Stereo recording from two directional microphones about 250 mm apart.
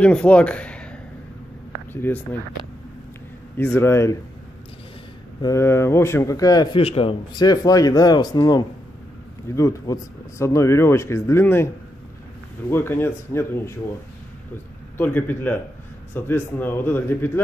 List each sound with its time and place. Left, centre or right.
0.0 s speech: centre
1.9 s speech: centre
3.5 s speech: centre
5.4 s speech: centre
15.0 s speech: centre